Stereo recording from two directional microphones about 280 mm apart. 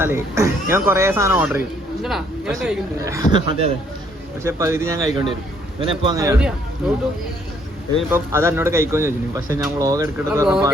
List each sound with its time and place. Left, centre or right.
0.0 s speech: centre
7.9 s speech: centre